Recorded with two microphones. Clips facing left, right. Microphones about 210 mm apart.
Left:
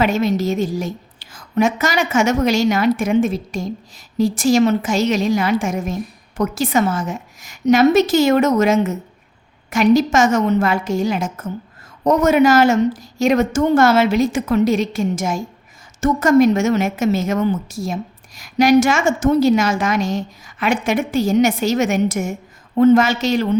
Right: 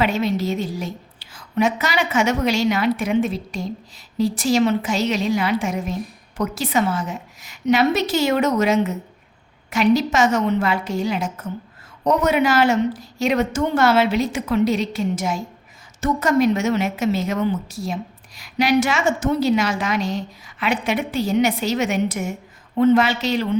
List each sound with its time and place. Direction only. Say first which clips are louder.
0.0 s a woman's voice: left 3 dB; 45° left (ahead or behind)